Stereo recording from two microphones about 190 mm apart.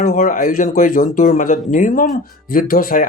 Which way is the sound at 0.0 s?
50° left (ahead or behind).